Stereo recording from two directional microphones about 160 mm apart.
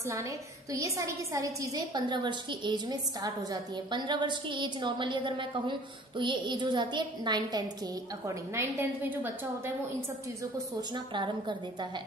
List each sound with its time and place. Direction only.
0.0 s a woman's voice: 20° right (ahead or behind)
8.5 s a woman's voice: 15° right (ahead or behind)
10.9 s a woman's voice: 30° right (ahead or behind)